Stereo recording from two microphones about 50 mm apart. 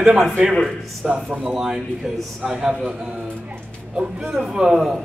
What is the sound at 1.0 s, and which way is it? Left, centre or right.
A man's voice, right.